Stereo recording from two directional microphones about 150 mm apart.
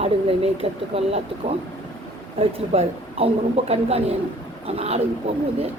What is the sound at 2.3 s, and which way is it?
A woman's voice, 40° right (ahead or behind).